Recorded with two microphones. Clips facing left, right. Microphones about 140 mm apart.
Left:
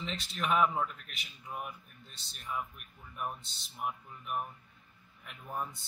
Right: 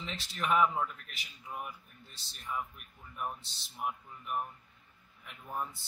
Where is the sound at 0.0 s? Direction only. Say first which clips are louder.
Left 1 dB; centre (ahead or behind).